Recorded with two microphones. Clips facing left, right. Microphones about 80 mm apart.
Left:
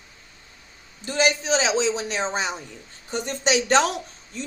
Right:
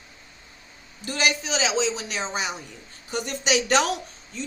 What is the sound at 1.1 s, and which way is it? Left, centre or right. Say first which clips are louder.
Speech: left 4 dB; left.